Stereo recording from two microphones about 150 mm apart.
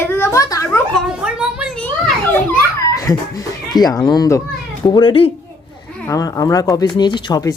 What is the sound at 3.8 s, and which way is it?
Speech, 25° left (ahead or behind).